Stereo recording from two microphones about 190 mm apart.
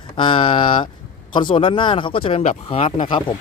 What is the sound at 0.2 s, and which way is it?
Speech, 25° left (ahead or behind).